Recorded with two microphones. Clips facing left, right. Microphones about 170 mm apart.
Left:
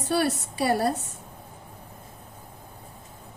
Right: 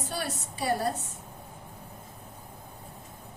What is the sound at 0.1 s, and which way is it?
Speech, 75° left (ahead or behind).